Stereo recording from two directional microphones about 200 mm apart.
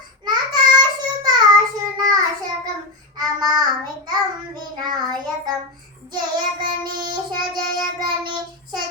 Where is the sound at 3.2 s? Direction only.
20° right (ahead or behind).